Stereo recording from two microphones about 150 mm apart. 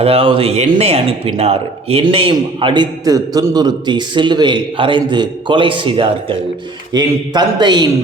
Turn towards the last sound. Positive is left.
turn(degrees=-30)  # may be behind; listen again after turning